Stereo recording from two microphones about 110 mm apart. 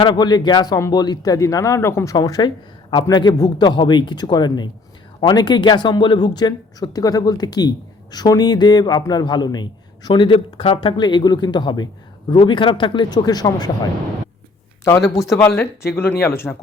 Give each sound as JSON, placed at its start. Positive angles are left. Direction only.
{"t": 0.0, "sound": "a man's voice", "side_deg": 40}
{"t": 2.1, "sound": "a man's voice", "side_deg": 35}
{"t": 14.8, "sound": "speech", "side_deg": 30}